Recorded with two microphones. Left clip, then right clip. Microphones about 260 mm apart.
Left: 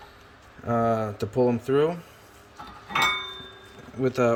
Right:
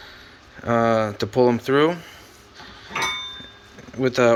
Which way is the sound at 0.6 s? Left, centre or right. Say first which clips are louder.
Right 5 dB; centre.